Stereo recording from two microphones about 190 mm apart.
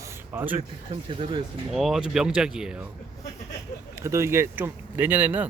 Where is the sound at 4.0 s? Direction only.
15° right (ahead or behind).